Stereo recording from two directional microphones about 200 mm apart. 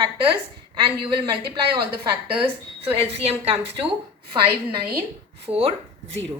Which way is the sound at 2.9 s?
30° right (ahead or behind).